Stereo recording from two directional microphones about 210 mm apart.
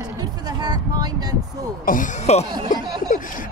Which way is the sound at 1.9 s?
35° left (ahead or behind).